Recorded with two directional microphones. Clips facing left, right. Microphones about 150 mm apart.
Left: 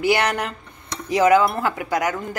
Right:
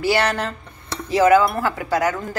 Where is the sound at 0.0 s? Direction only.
15° left (ahead or behind).